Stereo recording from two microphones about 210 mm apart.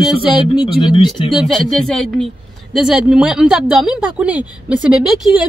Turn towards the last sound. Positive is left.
turn(degrees=-5)  # may be behind; listen again after turning